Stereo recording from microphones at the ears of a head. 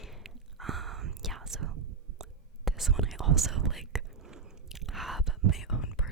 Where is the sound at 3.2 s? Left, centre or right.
Right.